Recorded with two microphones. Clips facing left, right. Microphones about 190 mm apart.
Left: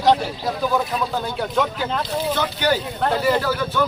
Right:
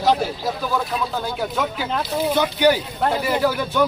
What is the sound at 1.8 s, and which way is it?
Speech, 10° right (ahead or behind).